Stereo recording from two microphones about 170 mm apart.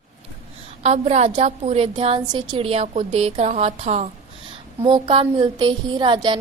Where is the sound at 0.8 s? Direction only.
40° right (ahead or behind).